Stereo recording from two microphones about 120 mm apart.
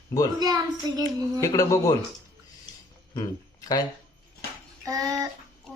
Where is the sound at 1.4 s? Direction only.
25° left (ahead or behind).